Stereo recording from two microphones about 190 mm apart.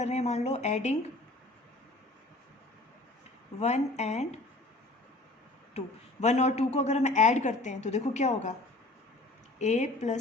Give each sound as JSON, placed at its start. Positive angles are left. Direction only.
{"t": 0.0, "sound": "a woman's voice", "side_deg": 35}
{"t": 3.6, "sound": "a woman's voice", "side_deg": 35}
{"t": 5.7, "sound": "a woman's voice", "side_deg": 35}
{"t": 9.6, "sound": "a woman's voice", "side_deg": 40}